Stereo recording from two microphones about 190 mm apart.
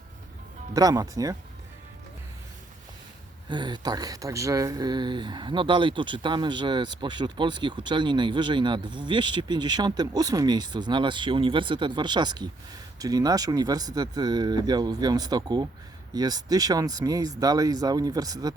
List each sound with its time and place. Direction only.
0.7 s speech: 20° right (ahead or behind)
3.5 s speech: 25° right (ahead or behind)